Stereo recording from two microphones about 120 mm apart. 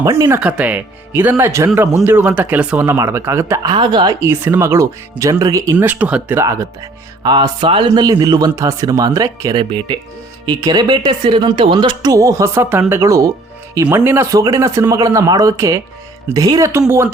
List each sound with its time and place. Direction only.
0.0 s speech: 25° right (ahead or behind)
0.3 s speech: 10° right (ahead or behind)
3.6 s speech: 40° right (ahead or behind)
4.2 s speech: 20° right (ahead or behind)
5.7 s speech: 15° right (ahead or behind)
6.4 s speech: 25° right (ahead or behind)
7.2 s music: 40° right (ahead or behind)
7.9 s speech: 35° right (ahead or behind)